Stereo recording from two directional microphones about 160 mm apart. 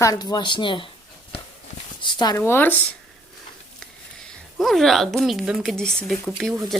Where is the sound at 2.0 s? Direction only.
30° left (ahead or behind).